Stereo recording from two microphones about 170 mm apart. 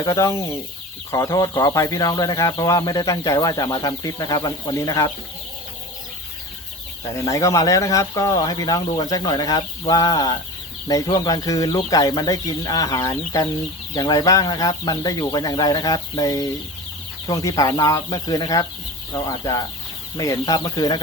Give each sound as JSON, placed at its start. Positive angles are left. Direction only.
{"t": 0.0, "sound": "speech", "side_deg": 20}
{"t": 7.0, "sound": "speech", "side_deg": 15}